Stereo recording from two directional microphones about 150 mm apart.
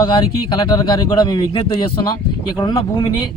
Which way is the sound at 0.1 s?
30° left (ahead or behind).